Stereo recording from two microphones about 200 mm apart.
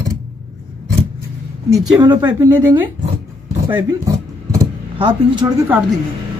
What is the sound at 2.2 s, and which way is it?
Speech, 10° right (ahead or behind).